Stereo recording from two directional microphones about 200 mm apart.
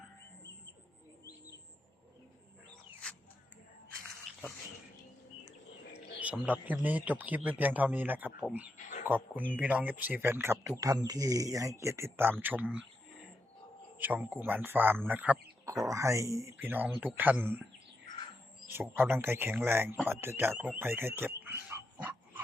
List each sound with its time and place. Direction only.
6.1 s speech: 10° right (ahead or behind)
18.7 s speech: 10° right (ahead or behind)
20.7 s a sound: 10° right (ahead or behind)